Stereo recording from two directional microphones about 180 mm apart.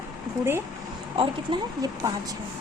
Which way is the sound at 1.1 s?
25° right (ahead or behind).